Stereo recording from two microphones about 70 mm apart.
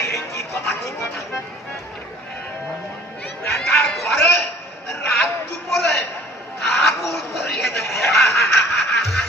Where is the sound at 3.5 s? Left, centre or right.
Centre.